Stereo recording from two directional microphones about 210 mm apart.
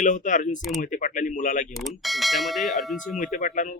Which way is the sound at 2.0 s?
Centre (ahead or behind).